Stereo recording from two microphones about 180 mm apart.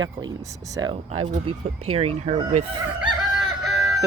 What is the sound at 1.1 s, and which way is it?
Speech, 35° right (ahead or behind).